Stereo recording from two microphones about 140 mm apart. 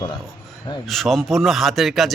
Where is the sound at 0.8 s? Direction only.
Centre (ahead or behind).